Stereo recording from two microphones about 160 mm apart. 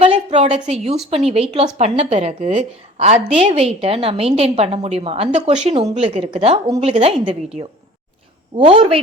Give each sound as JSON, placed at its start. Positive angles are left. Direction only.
{"t": 0.0, "sound": "a woman's voice", "side_deg": -35}